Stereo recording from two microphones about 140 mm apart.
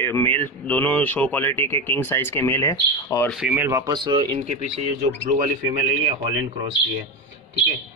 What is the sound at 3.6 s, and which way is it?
Speech, 20° right (ahead or behind).